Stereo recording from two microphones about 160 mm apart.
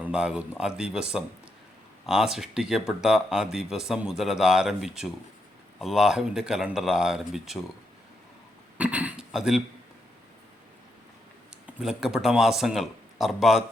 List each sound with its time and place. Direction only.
0.0 s speech: 5° right (ahead or behind)
8.8 s speech: 10° right (ahead or behind)
11.6 s speech: 5° right (ahead or behind)